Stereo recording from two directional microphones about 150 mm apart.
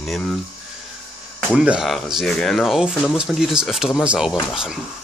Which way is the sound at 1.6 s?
5° right (ahead or behind).